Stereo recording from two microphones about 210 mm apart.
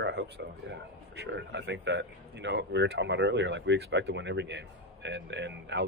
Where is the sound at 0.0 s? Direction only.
55° right (ahead or behind).